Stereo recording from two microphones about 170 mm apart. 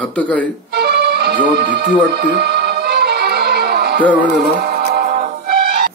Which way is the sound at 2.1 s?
70° right (ahead or behind).